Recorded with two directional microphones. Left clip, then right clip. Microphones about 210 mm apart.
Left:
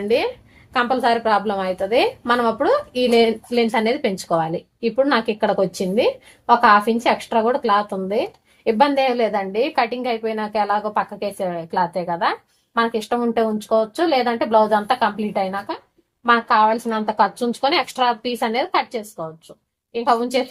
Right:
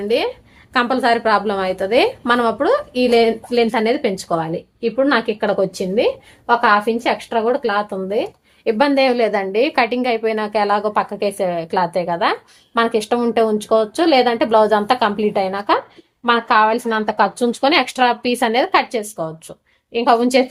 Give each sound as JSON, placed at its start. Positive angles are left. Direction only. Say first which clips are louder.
{"t": 0.1, "sound": "a woman's voice", "louder": "right 1 dB", "side_deg": -15}
{"t": 0.7, "sound": "a woman's voice", "louder": "right 2 dB", "side_deg": -25}